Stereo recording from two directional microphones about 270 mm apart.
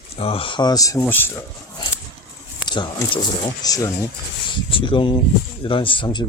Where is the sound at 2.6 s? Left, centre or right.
Centre.